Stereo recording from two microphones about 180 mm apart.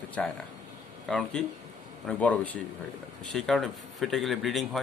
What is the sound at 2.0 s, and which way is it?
A man's voice, 10° left (ahead or behind).